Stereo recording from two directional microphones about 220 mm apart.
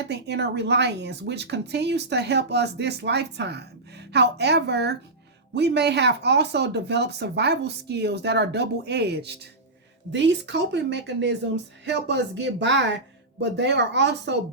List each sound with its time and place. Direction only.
0.1 s speech: 50° right (ahead or behind)